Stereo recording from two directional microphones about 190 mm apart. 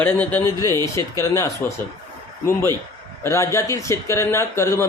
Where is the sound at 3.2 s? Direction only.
15° left (ahead or behind).